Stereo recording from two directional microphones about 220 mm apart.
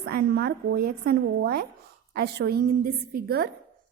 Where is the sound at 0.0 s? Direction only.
45° right (ahead or behind).